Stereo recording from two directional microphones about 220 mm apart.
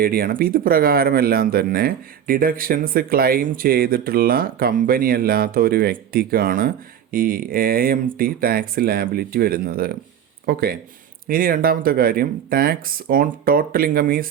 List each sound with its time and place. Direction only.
0.0 s speech: 40° right (ahead or behind)